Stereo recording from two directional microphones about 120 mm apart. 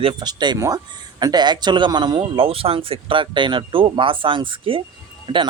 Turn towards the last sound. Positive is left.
turn(degrees=-40)  # may be behind; listen again after turning